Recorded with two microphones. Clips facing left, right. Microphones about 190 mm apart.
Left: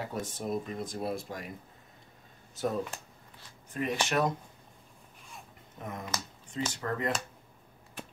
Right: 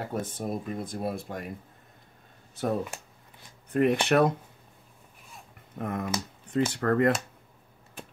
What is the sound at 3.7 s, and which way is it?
Speech, 60° right (ahead or behind).